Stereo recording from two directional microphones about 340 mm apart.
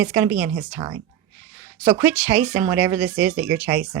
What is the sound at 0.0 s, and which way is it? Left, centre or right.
Speech, centre.